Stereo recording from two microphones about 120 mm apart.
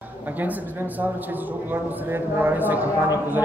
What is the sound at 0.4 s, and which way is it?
Speech, 15° right (ahead or behind).